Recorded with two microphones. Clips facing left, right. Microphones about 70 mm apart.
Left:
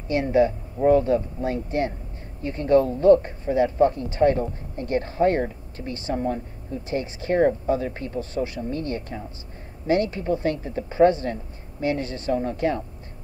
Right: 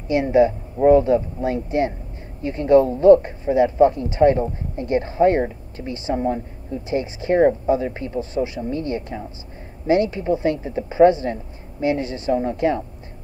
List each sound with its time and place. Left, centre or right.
0.1 s speech: centre
0.7 s speech: centre